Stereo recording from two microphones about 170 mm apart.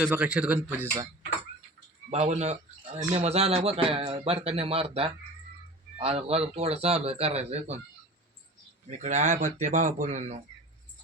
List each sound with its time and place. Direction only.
0.0 s speech: 10° right (ahead or behind)
2.0 s a man's voice: 40° right (ahead or behind)
9.0 s speech: 45° right (ahead or behind)